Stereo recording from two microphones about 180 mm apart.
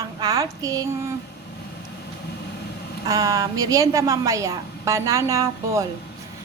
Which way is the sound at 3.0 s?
20° right (ahead or behind).